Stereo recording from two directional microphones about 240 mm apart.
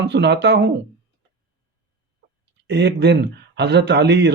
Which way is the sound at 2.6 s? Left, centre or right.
Right.